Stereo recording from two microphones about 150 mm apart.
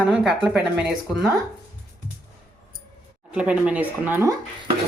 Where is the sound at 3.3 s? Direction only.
5° right (ahead or behind).